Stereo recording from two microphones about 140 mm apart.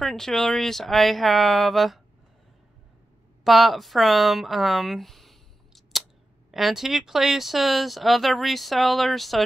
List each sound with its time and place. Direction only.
0.0 s speech: 5° left (ahead or behind)
3.4 s speech: centre (ahead or behind)
5.9 s scissors: centre (ahead or behind)
6.5 s speech: centre (ahead or behind)